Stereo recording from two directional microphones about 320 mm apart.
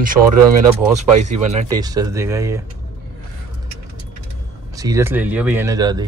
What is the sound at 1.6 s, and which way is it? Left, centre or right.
Speech, centre.